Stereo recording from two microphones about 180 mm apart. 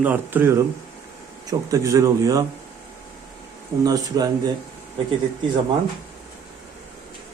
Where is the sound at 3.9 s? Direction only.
20° right (ahead or behind).